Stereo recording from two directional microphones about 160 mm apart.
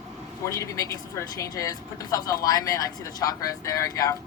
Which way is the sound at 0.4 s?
20° left (ahead or behind).